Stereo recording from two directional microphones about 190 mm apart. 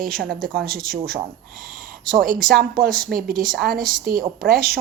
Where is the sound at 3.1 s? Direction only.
50° right (ahead or behind).